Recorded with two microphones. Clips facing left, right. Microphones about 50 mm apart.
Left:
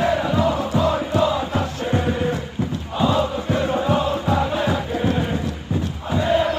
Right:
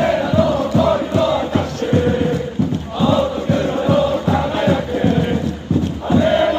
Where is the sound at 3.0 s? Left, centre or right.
Left.